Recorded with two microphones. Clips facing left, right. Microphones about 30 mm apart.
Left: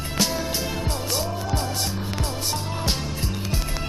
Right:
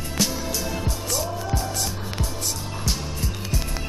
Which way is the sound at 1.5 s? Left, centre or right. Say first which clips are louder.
Left 1 dB; left.